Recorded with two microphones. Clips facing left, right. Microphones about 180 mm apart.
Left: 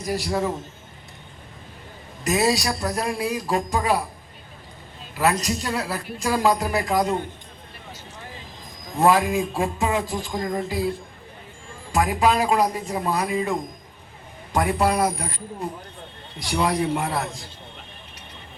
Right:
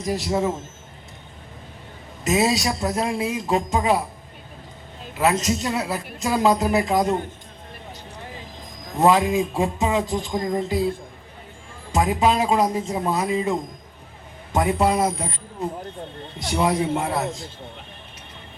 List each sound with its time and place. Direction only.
0.0 s a woman's voice: 20° right (ahead or behind)
2.2 s a woman's voice: 20° right (ahead or behind)
5.1 s a woman's voice: 20° right (ahead or behind)
9.0 s a woman's voice: 20° right (ahead or behind)
11.9 s a woman's voice: 20° right (ahead or behind)
16.4 s a woman's voice: 25° right (ahead or behind)